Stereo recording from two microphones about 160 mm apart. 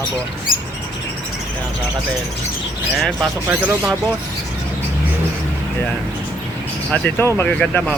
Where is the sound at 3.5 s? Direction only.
15° right (ahead or behind).